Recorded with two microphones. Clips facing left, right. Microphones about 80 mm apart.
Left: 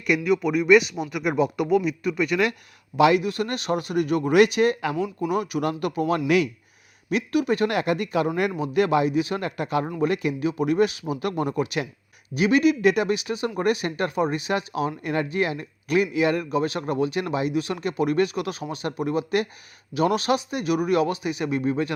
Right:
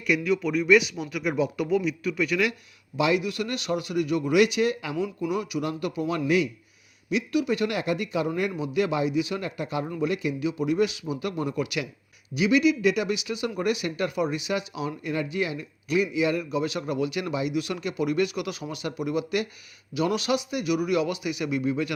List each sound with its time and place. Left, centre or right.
0.1 s a man's voice: left
3.2 s speech: left
4.9 s speech: centre
5.3 s a man's voice: left
7.1 s a man's voice: left
11.6 s speech: left